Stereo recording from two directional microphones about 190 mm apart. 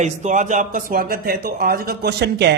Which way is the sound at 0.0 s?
40° right (ahead or behind).